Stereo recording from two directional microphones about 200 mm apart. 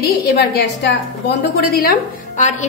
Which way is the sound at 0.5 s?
55° left (ahead or behind).